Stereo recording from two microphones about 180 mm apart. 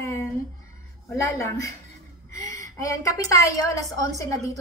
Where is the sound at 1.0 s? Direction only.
15° left (ahead or behind).